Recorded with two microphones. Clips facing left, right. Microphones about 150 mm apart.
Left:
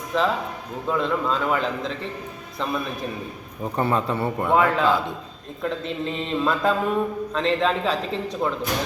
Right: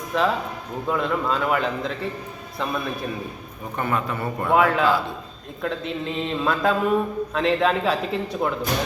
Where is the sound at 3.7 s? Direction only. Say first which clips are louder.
Left 2 dB; 30° left (ahead or behind).